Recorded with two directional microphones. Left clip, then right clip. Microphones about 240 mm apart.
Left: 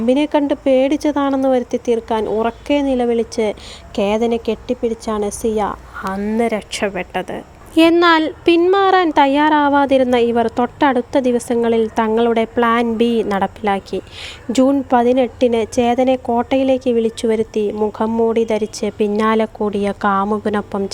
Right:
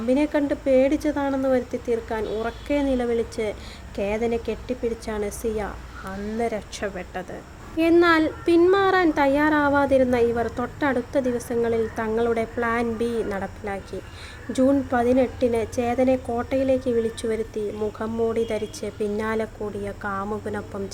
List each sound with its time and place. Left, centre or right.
0.1 s speech: left